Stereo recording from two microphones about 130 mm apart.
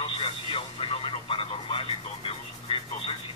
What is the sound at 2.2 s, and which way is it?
Toothbrush, 45° left (ahead or behind).